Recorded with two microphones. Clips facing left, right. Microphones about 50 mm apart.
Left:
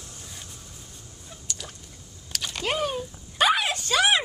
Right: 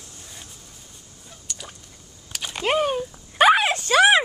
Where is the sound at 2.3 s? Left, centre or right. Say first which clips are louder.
Right 5 dB; centre.